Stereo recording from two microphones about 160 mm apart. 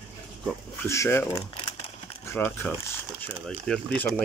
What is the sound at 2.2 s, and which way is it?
Speech, 10° left (ahead or behind).